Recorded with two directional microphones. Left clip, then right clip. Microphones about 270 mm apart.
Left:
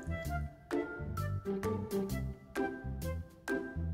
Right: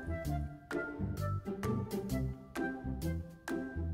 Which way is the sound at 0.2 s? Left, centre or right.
Centre.